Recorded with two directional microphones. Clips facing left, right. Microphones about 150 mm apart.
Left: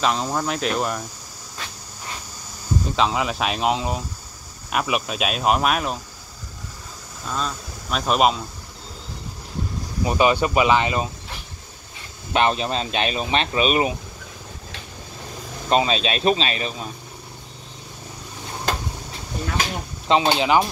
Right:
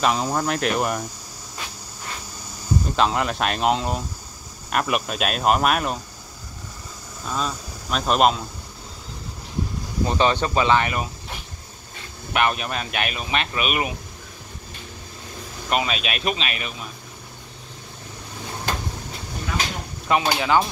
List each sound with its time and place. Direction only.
0.0 s speech: 5° right (ahead or behind)
3.0 s speech: centre (ahead or behind)
7.2 s speech: 5° right (ahead or behind)
10.0 s speech: 10° left (ahead or behind)
12.3 s a man's voice: 25° left (ahead or behind)
15.7 s a man's voice: 30° left (ahead or behind)
20.1 s a man's voice: 25° left (ahead or behind)